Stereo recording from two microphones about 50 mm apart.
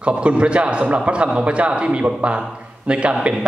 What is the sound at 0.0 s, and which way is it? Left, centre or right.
A man's voice, right.